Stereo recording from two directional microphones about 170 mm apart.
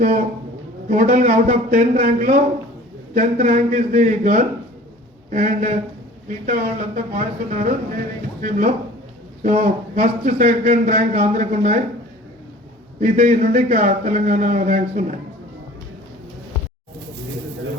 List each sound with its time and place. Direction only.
0.0 s a man's voice: 45° right (ahead or behind)
13.0 s a man's voice: 50° right (ahead or behind)